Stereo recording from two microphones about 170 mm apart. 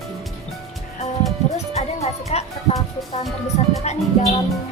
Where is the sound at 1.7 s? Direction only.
40° left (ahead or behind).